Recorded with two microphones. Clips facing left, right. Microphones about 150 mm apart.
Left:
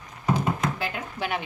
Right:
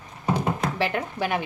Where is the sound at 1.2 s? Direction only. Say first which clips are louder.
Right 2 dB; 40° right (ahead or behind).